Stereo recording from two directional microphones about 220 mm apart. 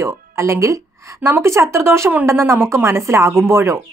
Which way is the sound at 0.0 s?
10° right (ahead or behind).